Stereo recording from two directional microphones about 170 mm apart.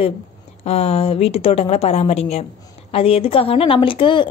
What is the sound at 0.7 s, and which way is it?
A woman's voice, 35° left (ahead or behind).